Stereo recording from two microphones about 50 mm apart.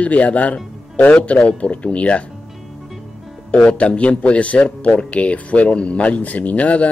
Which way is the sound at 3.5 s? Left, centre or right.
Left.